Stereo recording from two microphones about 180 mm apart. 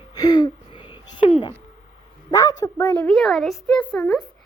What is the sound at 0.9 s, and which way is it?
Speech, 30° left (ahead or behind).